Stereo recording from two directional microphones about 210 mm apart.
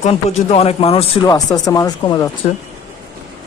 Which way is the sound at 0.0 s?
30° left (ahead or behind).